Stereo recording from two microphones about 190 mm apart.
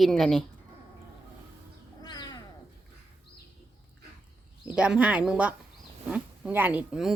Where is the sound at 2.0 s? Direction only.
20° left (ahead or behind).